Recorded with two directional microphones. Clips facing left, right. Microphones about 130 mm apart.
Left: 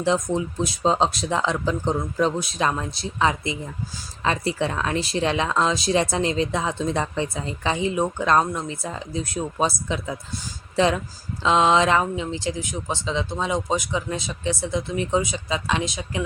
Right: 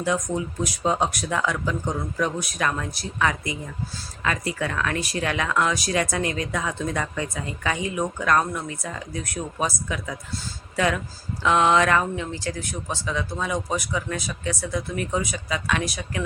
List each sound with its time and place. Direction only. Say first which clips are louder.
0.0 s speech: left 3 dB; 25° left (ahead or behind)